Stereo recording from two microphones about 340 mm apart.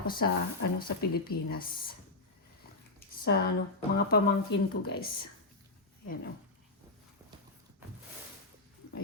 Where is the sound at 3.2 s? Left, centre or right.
Left.